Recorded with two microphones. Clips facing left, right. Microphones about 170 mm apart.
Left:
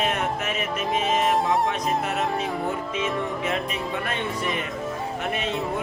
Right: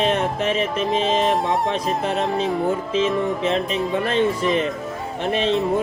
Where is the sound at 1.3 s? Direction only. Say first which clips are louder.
Right 2 dB; centre (ahead or behind).